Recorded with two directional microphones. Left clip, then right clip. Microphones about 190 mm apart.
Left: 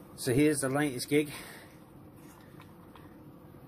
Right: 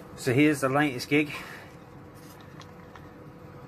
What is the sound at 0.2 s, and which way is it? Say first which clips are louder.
Speech: right 4 dB; 10° left (ahead or behind).